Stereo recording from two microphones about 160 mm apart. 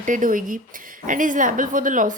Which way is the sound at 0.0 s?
55° right (ahead or behind).